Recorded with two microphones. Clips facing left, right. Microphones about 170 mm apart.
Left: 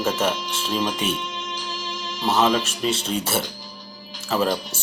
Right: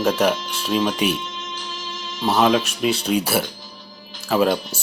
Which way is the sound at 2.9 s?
25° left (ahead or behind).